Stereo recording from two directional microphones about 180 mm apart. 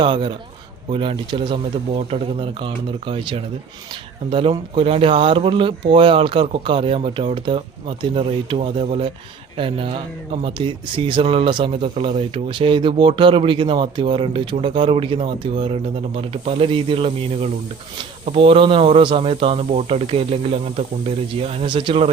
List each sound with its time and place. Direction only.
0.0 s a man's voice: 25° right (ahead or behind)